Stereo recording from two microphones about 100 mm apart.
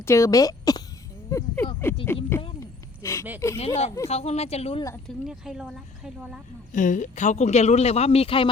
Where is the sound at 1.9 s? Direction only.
25° left (ahead or behind).